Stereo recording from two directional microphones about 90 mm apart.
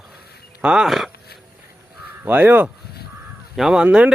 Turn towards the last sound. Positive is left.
turn(degrees=-15)  # may be behind; listen again after turning